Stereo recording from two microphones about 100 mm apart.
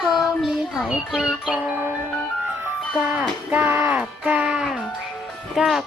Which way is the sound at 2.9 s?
10° right (ahead or behind).